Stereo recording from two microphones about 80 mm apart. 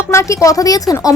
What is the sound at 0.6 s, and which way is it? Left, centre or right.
Speech, left.